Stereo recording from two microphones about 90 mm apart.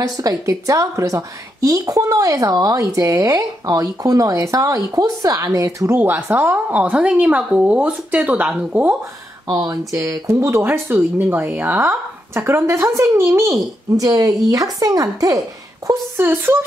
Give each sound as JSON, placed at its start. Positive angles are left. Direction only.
{"t": 0.0, "sound": "a woman's voice", "side_deg": -40}
{"t": 5.9, "sound": "a woman's voice", "side_deg": -25}
{"t": 9.7, "sound": "a woman's voice", "side_deg": -35}
{"t": 15.9, "sound": "speech", "side_deg": -25}